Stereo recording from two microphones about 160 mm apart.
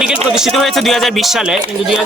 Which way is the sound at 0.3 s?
Centre (ahead or behind).